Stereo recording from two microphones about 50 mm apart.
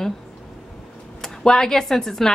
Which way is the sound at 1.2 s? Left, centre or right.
Centre.